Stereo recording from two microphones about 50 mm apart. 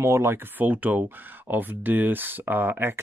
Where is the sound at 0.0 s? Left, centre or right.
Right.